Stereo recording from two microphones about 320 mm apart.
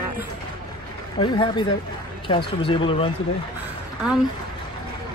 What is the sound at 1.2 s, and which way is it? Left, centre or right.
Speech, centre.